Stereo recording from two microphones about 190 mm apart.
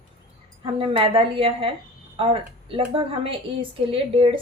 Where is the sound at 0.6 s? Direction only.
30° right (ahead or behind).